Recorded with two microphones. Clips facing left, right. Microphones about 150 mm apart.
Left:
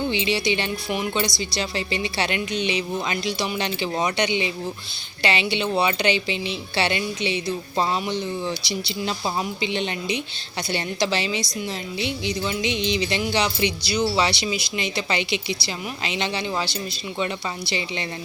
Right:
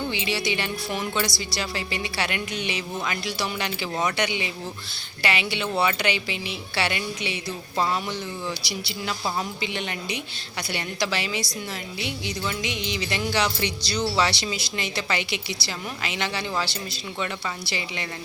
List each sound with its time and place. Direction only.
0.1 s music: 20° left (ahead or behind)
17.7 s music: 25° left (ahead or behind)